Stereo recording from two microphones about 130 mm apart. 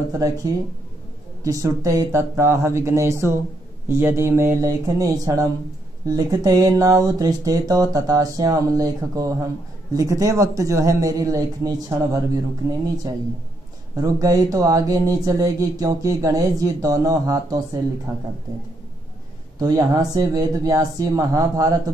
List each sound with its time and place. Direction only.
0.2 s speech: 25° right (ahead or behind)
1.4 s speech: 25° right (ahead or behind)
19.6 s speech: 30° right (ahead or behind)